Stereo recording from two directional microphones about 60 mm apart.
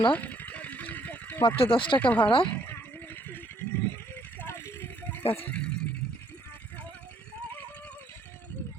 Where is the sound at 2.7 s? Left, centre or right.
Left.